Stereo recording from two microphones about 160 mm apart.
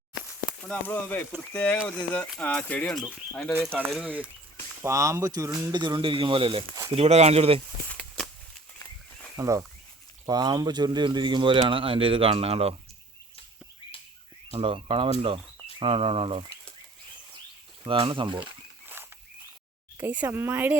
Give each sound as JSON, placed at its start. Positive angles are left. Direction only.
{"t": 0.6, "sound": "speech", "side_deg": 10}
{"t": 3.8, "sound": "speech", "side_deg": -5}
{"t": 4.8, "sound": "speech", "side_deg": -20}
{"t": 7.9, "sound": "a sound", "side_deg": 5}
{"t": 9.3, "sound": "speech", "side_deg": -20}
{"t": 14.5, "sound": "speech", "side_deg": -35}
{"t": 17.8, "sound": "speech", "side_deg": -30}
{"t": 19.0, "sound": "a sound", "side_deg": -15}
{"t": 20.0, "sound": "speech", "side_deg": -10}